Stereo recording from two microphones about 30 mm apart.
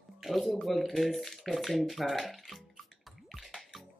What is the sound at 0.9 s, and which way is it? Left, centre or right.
Speech, centre.